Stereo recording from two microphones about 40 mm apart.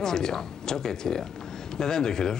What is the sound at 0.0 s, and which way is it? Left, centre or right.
Speech, centre.